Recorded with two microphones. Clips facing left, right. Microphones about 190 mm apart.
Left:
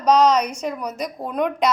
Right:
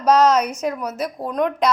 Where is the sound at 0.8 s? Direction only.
5° right (ahead or behind).